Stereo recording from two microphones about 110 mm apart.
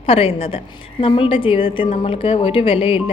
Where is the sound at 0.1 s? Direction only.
60° left (ahead or behind).